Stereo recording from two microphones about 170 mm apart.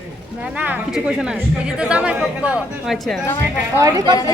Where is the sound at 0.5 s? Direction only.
10° right (ahead or behind).